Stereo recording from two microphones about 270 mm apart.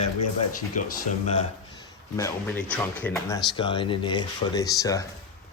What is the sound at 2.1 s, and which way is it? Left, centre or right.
Speech, centre.